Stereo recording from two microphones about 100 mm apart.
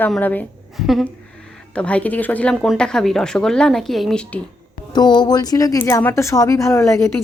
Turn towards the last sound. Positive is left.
turn(degrees=30)  # may be behind; listen again after turning